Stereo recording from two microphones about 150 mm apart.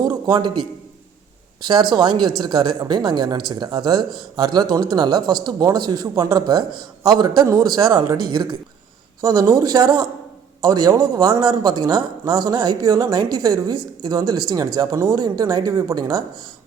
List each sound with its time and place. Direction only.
0.0 s a sound: 30° right (ahead or behind)
1.6 s speech: 30° right (ahead or behind)
9.2 s speech: 25° right (ahead or behind)